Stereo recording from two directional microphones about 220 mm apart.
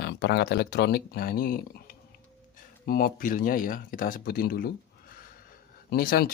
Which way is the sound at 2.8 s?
40° left (ahead or behind).